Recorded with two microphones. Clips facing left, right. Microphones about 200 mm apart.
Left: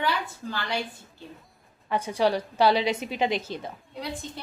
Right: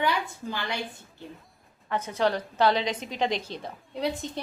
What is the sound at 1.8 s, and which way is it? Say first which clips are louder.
A woman's voice: left 2 dB; 10° left (ahead or behind).